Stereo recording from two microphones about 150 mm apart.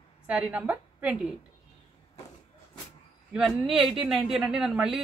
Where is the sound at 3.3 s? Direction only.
Centre (ahead or behind).